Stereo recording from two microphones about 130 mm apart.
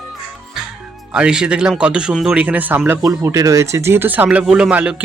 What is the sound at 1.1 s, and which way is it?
Speech, 5° right (ahead or behind).